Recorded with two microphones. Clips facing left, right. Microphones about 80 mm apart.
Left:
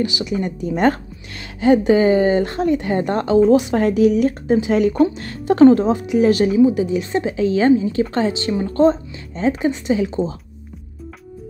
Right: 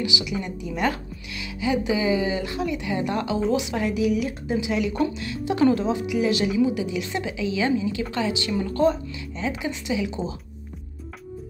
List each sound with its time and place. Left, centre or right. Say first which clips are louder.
0.0 s a woman's voice: left 6 dB; left